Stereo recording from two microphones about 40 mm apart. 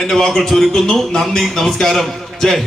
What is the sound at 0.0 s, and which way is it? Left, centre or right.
A man's voice, centre.